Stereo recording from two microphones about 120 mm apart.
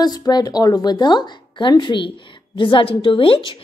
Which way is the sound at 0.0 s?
35° left (ahead or behind).